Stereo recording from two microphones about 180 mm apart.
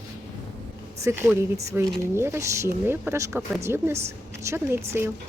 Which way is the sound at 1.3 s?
15° right (ahead or behind).